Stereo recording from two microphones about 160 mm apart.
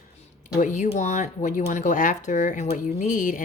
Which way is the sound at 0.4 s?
55° left (ahead or behind).